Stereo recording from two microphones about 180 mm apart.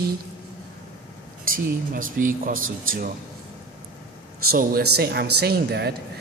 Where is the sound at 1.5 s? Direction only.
50° right (ahead or behind).